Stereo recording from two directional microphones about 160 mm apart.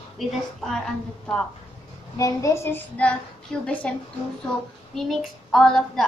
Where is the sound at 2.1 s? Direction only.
20° left (ahead or behind).